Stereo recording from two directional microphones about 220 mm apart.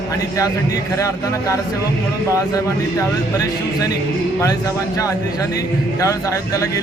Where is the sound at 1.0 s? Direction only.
15° left (ahead or behind).